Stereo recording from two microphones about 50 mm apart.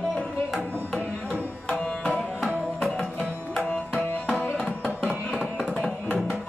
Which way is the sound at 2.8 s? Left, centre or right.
Centre.